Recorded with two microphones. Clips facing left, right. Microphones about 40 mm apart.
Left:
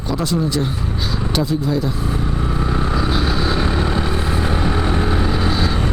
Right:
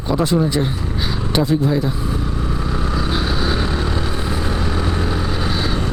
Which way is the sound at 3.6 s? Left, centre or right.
Centre.